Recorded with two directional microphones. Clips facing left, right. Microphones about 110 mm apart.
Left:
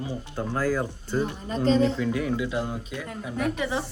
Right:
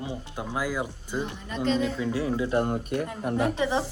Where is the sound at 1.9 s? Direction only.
25° right (ahead or behind).